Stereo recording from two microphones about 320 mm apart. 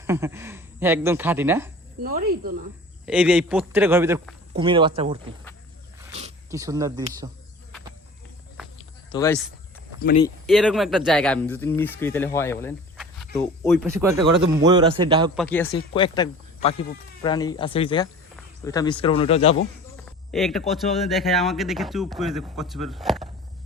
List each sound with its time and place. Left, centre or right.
0.1 s a man's voice: centre
2.0 s speech: right
3.1 s a man's voice: centre
6.5 s a man's voice: centre
9.0 s speech: centre
10.0 s speech: left
10.2 s speech: centre
13.8 s a man's voice: centre
15.4 s speech: centre
20.1 s speech: centre